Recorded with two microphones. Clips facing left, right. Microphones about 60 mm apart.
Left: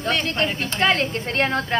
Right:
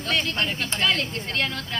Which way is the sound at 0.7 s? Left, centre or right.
Left.